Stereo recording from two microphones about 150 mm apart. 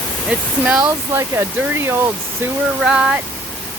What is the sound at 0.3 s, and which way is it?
Speech, 5° right (ahead or behind).